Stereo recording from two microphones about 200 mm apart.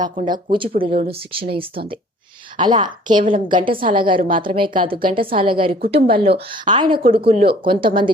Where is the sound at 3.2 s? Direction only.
40° right (ahead or behind).